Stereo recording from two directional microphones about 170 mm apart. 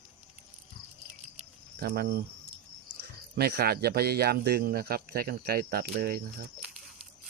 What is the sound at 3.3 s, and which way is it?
Speech, 65° right (ahead or behind).